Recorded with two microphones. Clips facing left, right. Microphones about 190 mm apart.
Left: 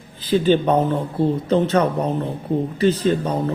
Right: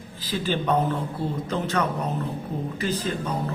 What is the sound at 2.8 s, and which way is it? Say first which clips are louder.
Speech: left 10 dB; 30° left (ahead or behind).